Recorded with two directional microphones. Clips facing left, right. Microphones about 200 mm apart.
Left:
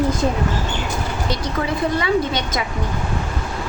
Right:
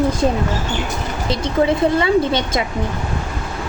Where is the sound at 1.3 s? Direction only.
25° right (ahead or behind).